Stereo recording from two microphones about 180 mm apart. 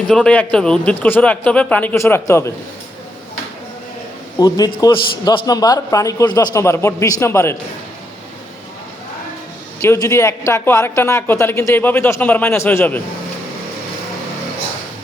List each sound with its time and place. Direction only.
0.1 s a man's voice: 5° left (ahead or behind)
4.4 s a man's voice: 20° left (ahead or behind)
9.8 s a man's voice: 15° left (ahead or behind)